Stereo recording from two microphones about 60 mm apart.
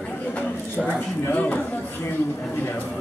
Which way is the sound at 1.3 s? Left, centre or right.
Left.